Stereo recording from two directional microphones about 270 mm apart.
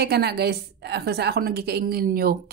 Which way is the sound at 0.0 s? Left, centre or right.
Right.